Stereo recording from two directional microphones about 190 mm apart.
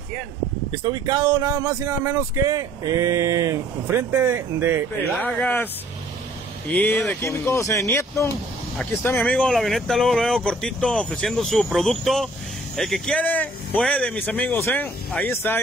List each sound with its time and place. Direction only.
0.7 s speech: 25° right (ahead or behind)
5.2 s speech: 10° left (ahead or behind)
6.7 s speech: 10° left (ahead or behind)